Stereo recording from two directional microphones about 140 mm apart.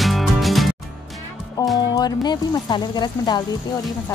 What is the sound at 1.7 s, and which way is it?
Speech, 30° left (ahead or behind).